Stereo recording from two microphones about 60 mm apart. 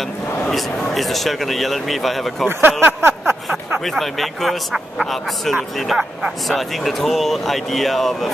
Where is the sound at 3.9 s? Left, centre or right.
Centre.